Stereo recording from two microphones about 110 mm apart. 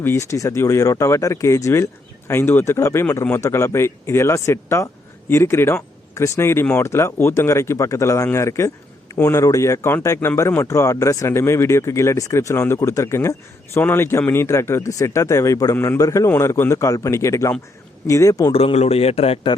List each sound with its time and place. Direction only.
0.0 s speech: 25° left (ahead or behind)
18.5 s a man's voice: 65° left (ahead or behind)